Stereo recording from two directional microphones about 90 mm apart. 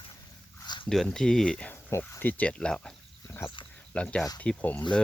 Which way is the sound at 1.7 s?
25° left (ahead or behind).